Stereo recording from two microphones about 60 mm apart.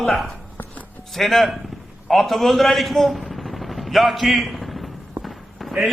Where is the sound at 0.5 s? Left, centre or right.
Left.